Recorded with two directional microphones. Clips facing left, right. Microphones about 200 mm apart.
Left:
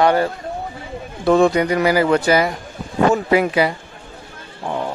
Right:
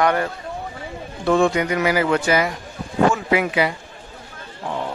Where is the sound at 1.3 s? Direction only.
35° left (ahead or behind).